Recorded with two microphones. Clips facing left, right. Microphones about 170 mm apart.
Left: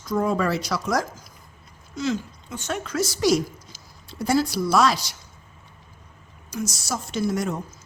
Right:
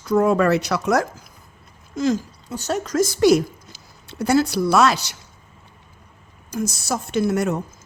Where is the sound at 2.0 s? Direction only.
40° right (ahead or behind).